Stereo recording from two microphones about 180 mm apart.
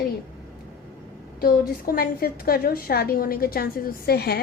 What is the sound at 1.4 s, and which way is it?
A woman's voice, 55° left (ahead or behind).